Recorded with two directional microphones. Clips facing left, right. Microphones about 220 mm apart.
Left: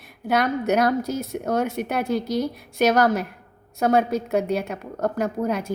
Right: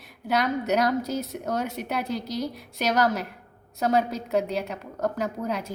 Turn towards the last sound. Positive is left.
turn(degrees=50)  # may be behind; listen again after turning